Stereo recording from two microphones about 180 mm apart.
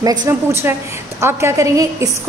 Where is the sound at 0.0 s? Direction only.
20° right (ahead or behind).